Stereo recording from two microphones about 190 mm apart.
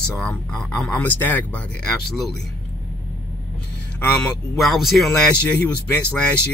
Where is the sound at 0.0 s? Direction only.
5° left (ahead or behind).